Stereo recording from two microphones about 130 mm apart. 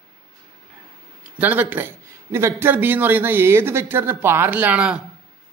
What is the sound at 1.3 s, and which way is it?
Speech, 15° right (ahead or behind).